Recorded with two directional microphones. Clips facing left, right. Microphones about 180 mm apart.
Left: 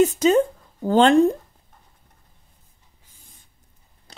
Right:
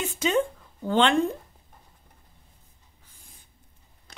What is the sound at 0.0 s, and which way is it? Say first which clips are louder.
A woman's voice: left 8 dB; 40° left (ahead or behind).